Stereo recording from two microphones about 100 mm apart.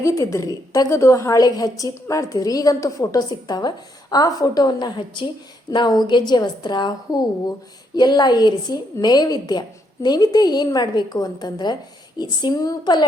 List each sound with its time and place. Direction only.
0.0 s a woman's voice: 30° left (ahead or behind); by 13.1 s 45° left (ahead or behind)